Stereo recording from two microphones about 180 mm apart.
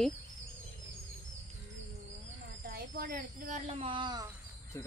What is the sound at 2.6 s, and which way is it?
Speech, 55° right (ahead or behind).